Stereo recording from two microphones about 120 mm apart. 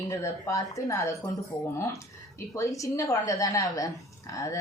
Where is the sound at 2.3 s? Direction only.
25° left (ahead or behind).